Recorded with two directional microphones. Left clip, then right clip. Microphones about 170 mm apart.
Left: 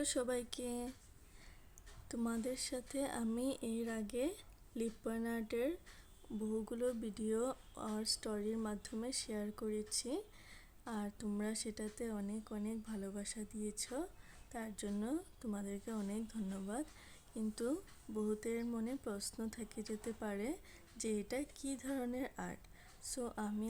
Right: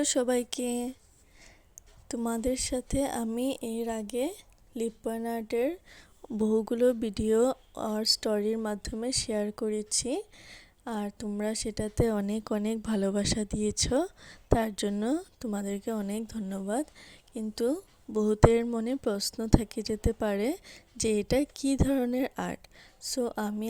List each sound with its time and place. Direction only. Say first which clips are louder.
0.0 s a woman's voice: right 11 dB; 40° right (ahead or behind)
2.2 s a woman's voice: right 11 dB; 40° right (ahead or behind)